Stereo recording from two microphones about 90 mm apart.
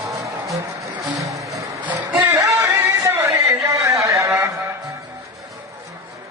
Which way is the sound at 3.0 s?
30° right (ahead or behind).